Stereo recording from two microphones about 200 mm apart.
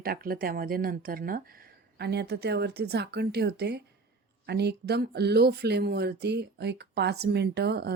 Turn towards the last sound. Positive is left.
turn(degrees=-55)  # may be behind; listen again after turning